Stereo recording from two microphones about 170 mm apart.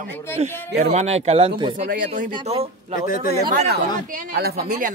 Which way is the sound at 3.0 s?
50° left (ahead or behind).